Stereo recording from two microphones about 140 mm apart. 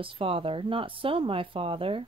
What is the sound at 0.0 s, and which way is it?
Speech, 40° right (ahead or behind).